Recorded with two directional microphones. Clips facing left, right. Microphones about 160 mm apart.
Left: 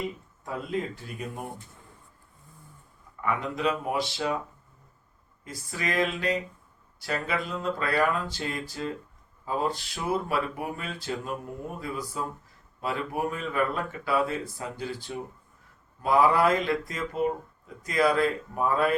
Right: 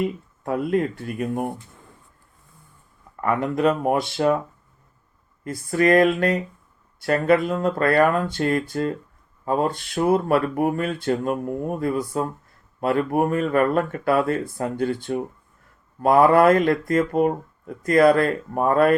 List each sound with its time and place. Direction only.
0.0 s speech: 60° right (ahead or behind)
3.2 s speech: 55° right (ahead or behind)
5.5 s speech: 55° right (ahead or behind)